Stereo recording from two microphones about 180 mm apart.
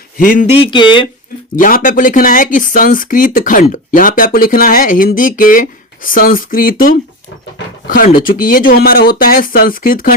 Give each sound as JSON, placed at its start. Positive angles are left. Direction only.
{"t": 0.2, "sound": "speech", "side_deg": 50}
{"t": 0.6, "sound": "speech", "side_deg": 25}
{"t": 1.5, "sound": "speech", "side_deg": 50}